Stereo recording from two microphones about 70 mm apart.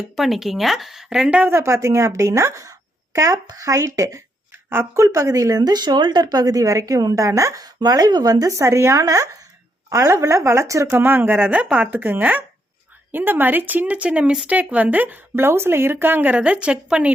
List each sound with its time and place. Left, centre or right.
0.2 s a woman's voice: centre
1.5 s a woman's voice: right
4.5 s speech: right
5.0 s speech: right
7.3 s speech: right
7.6 s speech: right
10.9 s speech: right